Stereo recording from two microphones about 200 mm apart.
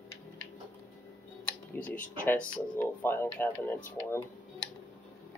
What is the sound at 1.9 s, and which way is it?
Speech, 40° left (ahead or behind).